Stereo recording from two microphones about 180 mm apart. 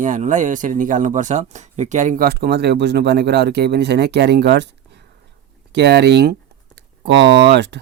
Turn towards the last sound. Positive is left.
turn(degrees=-70)  # may be behind; listen again after turning